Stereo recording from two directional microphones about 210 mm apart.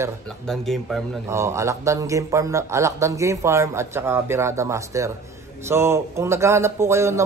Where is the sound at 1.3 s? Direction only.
15° right (ahead or behind).